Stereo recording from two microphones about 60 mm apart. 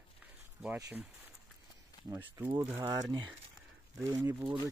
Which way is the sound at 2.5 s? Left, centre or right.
Right.